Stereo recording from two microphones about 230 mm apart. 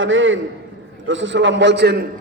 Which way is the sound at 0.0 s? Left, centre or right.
Right.